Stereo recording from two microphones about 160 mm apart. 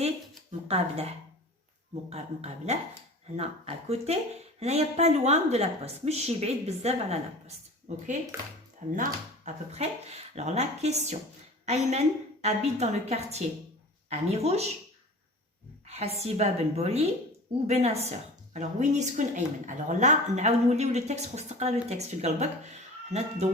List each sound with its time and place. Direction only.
0.7 s a woman's voice: 40° right (ahead or behind)
8.3 s speech: 15° right (ahead or behind)
9.0 s a woman's voice: 45° right (ahead or behind)
15.9 s a woman's voice: 40° right (ahead or behind)